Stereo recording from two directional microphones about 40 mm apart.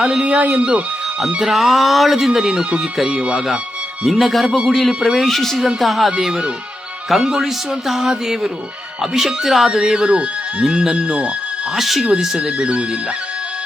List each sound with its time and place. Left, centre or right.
0.0 s speech: right
1.4 s speech: centre
2.4 s speech: right
4.0 s speech: centre
5.3 s a woman's voice: centre
6.1 s speech: centre
11.7 s speech: centre
12.4 s speech: right